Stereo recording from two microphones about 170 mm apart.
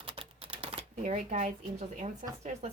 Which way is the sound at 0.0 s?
30° right (ahead or behind).